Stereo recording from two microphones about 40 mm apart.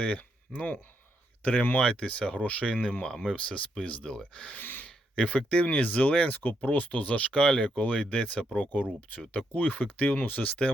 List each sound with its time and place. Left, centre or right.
0.0 s speech: left
1.8 s speech: left
4.5 s gasp: left
5.1 s speech: left